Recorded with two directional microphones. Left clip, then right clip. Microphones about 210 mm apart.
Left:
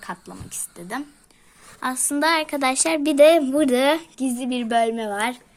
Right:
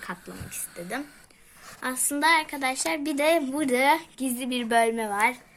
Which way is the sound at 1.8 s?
50° left (ahead or behind).